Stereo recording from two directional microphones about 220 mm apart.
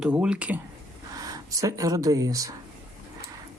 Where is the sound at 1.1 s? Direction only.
15° right (ahead or behind).